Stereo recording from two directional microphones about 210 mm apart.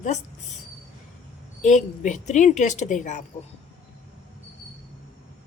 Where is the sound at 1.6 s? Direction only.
35° left (ahead or behind).